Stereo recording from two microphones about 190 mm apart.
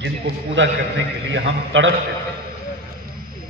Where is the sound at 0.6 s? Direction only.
75° right (ahead or behind).